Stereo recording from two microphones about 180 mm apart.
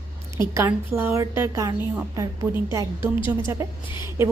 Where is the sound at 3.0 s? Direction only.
30° left (ahead or behind).